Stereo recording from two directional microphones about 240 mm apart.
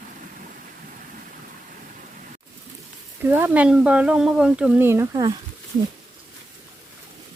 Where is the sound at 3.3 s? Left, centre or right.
Centre.